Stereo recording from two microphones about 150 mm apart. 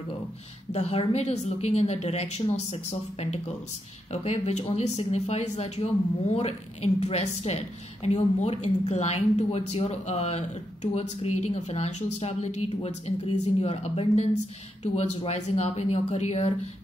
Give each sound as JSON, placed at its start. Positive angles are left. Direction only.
{"t": 0.7, "sound": "a woman's voice", "side_deg": 45}